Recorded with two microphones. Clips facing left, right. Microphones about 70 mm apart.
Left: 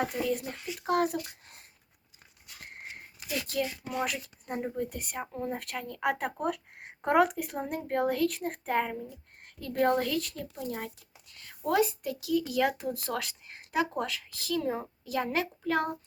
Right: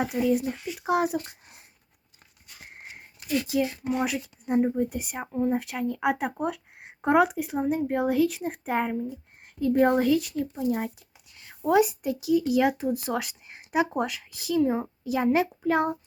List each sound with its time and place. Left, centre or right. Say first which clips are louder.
0.0 s speech: right 6 dB; centre
2.6 s a sound: even; centre
3.5 s speech: right 4 dB; centre